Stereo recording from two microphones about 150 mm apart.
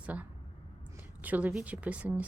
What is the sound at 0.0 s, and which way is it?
A woman's voice, 10° right (ahead or behind).